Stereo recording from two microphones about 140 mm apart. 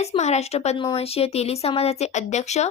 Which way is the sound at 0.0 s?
50° left (ahead or behind).